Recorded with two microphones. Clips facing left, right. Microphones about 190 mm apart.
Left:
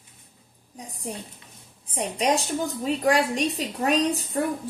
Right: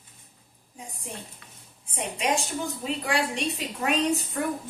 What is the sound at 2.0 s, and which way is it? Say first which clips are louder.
A woman's voice: left 4 dB; 35° left (ahead or behind).